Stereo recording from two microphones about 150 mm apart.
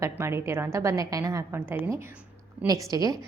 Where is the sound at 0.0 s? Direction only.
15° right (ahead or behind).